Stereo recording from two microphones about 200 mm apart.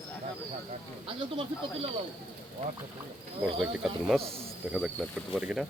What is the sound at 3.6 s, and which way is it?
Speech, centre (ahead or behind).